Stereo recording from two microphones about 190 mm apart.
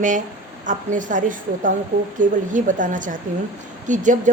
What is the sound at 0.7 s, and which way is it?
A woman's voice, 40° right (ahead or behind).